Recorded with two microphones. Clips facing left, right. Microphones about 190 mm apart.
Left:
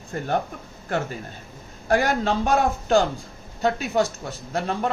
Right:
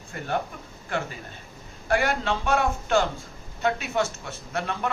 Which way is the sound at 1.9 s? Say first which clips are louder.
Left 3 dB; 40° left (ahead or behind).